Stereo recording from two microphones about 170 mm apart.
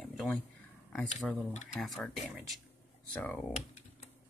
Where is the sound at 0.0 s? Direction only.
Centre (ahead or behind).